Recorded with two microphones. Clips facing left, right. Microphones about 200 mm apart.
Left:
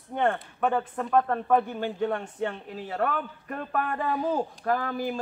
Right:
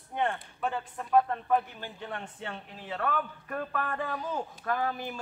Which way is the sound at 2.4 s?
45° left (ahead or behind).